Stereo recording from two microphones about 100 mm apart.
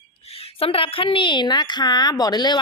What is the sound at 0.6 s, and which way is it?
A woman's voice, 70° left (ahead or behind).